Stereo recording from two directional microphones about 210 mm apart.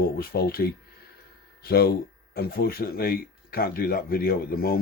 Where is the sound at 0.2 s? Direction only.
45° left (ahead or behind).